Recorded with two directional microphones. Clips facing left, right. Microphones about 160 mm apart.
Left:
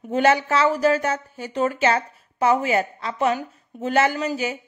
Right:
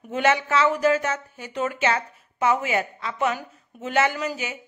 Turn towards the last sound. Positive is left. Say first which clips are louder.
# left 3 dB
turn(degrees=40)  # may be behind; listen again after turning